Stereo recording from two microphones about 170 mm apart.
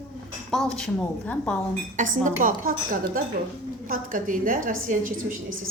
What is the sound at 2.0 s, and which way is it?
A woman's voice, 50° right (ahead or behind).